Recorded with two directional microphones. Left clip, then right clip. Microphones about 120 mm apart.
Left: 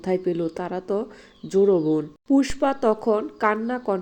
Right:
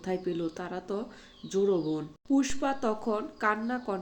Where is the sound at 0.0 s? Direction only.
30° left (ahead or behind).